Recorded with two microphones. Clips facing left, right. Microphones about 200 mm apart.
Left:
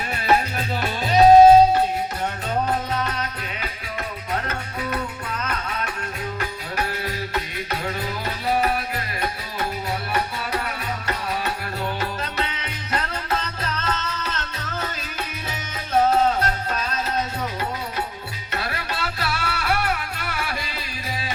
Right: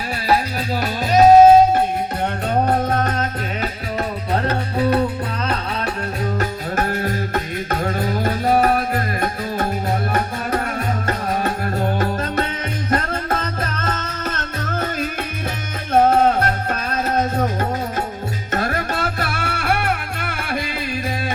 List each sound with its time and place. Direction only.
0.8 s music: 40° right (ahead or behind)
4.3 s music: 35° right (ahead or behind)
6.4 s music: 45° right (ahead or behind)
15.9 s music: 55° right (ahead or behind)